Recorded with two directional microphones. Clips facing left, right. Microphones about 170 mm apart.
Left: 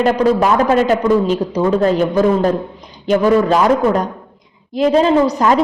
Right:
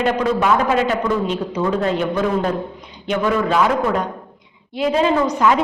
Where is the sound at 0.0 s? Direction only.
40° left (ahead or behind).